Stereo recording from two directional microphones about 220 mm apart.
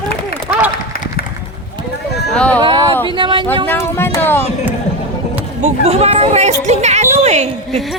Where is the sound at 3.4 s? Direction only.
10° left (ahead or behind).